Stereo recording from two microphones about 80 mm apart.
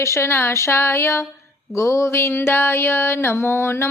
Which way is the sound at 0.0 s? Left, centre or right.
Left.